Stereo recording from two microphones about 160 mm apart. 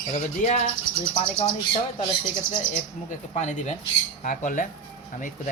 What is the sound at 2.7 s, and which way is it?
Speech, 50° left (ahead or behind).